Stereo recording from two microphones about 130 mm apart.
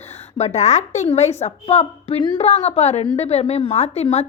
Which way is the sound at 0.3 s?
60° left (ahead or behind).